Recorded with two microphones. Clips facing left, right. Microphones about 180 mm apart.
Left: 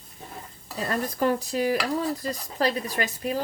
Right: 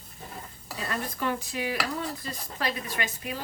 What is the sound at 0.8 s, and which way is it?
Dishes, 40° left (ahead or behind).